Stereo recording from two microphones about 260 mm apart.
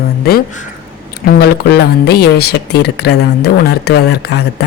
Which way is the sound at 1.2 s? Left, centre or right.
Left.